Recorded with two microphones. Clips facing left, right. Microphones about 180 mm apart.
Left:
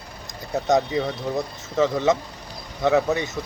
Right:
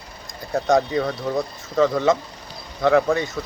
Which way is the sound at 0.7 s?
20° left (ahead or behind).